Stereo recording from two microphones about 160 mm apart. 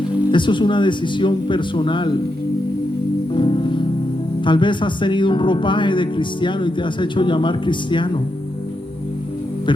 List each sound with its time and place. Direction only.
0.3 s speech: 30° left (ahead or behind)
3.3 s speech: 30° left (ahead or behind)